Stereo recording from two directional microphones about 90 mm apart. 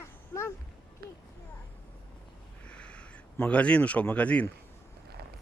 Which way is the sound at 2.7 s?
15° left (ahead or behind).